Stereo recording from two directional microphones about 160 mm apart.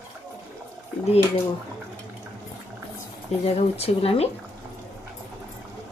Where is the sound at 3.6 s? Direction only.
40° left (ahead or behind).